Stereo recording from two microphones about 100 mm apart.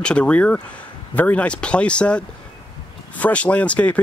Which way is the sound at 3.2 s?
15° left (ahead or behind).